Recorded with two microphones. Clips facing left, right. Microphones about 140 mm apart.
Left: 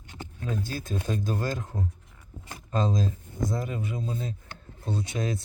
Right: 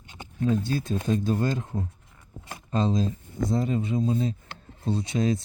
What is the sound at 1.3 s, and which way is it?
Speech, 25° right (ahead or behind).